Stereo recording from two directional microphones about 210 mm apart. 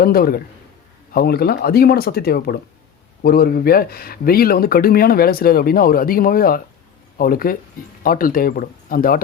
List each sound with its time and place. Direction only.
0.0 s speech: 45° left (ahead or behind)